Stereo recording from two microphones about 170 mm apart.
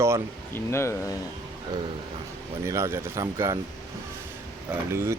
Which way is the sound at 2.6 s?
15° right (ahead or behind).